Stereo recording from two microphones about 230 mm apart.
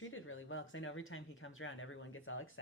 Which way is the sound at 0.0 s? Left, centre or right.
Left.